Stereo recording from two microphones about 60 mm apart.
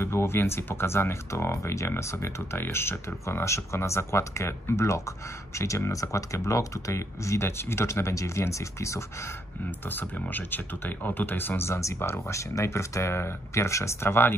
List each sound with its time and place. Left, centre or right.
0.0 s speech: left
9.8 s speech: left